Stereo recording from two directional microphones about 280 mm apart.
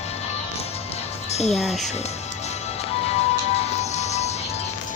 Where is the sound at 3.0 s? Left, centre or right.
Left.